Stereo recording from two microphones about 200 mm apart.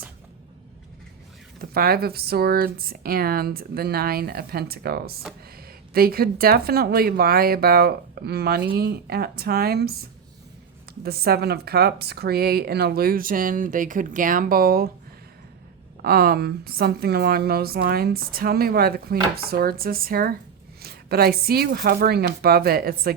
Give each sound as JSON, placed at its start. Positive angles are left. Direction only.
{"t": 1.7, "sound": "a woman's voice", "side_deg": -50}
{"t": 16.0, "sound": "a woman's voice", "side_deg": -50}